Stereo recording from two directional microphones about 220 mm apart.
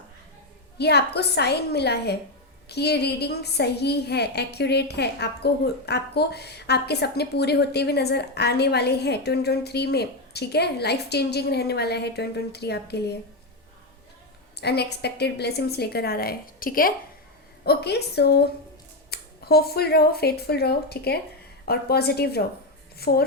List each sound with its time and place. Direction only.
0.8 s a woman's voice: 50° left (ahead or behind)
14.5 s a woman's voice: 50° left (ahead or behind)